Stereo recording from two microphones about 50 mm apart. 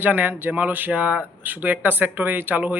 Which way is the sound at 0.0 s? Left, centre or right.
Right.